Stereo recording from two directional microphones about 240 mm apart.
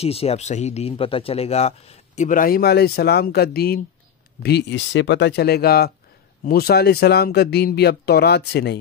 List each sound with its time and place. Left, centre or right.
0.0 s speech: left